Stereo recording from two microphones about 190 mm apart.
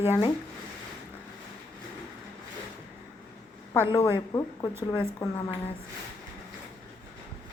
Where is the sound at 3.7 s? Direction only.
15° left (ahead or behind).